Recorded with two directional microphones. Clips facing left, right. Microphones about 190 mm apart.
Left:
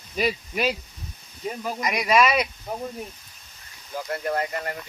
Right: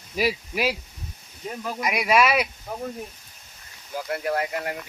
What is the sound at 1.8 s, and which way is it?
Speech, 5° right (ahead or behind).